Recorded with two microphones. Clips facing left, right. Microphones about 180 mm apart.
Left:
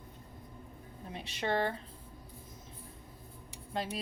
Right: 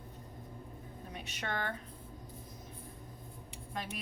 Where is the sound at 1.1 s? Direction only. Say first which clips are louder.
Left 7 dB; 30° left (ahead or behind).